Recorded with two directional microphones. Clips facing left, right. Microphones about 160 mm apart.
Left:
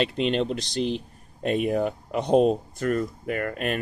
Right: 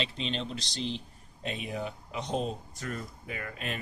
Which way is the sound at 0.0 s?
55° left (ahead or behind).